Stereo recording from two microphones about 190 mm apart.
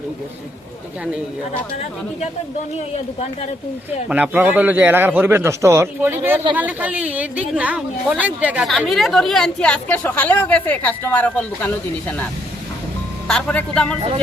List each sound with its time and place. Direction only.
4.1 s a man's voice: 10° right (ahead or behind); by 11.7 s 10° left (ahead or behind)
13.2 s a woman's voice: 5° left (ahead or behind)